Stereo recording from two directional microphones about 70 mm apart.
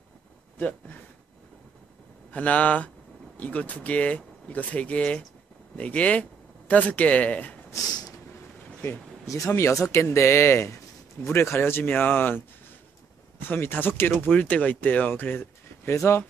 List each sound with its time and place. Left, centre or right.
0.6 s speech: left
2.3 s speech: left
9.2 s speech: left